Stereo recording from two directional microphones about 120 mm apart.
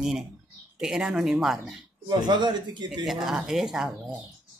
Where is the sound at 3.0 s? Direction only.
5° right (ahead or behind).